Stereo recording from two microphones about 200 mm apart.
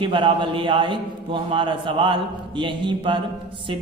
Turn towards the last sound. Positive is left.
turn(degrees=-25)  # may be behind; listen again after turning